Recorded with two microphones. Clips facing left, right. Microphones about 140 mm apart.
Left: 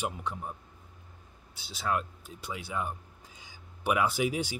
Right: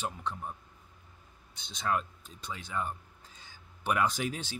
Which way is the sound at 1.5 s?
5° left (ahead or behind).